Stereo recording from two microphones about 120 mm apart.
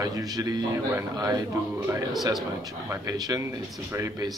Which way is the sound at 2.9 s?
30° right (ahead or behind).